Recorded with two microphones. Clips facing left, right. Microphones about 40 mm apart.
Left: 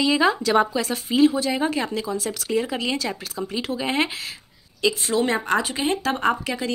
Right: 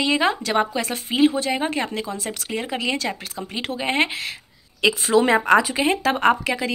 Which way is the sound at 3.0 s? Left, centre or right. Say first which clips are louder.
Even; right.